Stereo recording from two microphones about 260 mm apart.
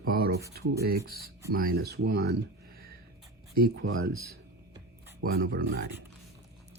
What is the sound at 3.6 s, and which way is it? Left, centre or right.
Speech, right.